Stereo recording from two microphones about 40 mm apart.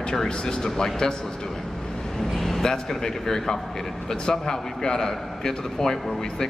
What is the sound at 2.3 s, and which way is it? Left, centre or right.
Speech, centre.